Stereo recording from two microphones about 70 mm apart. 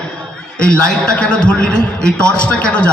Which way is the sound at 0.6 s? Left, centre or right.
Centre.